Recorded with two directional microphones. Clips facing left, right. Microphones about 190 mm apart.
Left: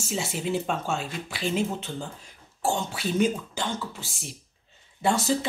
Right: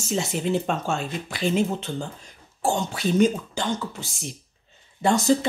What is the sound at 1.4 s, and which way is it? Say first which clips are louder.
Speech: right 4 dB; 40° right (ahead or behind).